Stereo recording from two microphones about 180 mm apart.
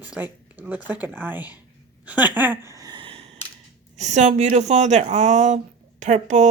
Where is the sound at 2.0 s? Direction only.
10° right (ahead or behind); by 3.4 s 35° right (ahead or behind).